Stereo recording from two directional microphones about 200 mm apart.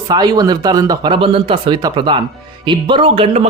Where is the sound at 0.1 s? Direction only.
20° right (ahead or behind).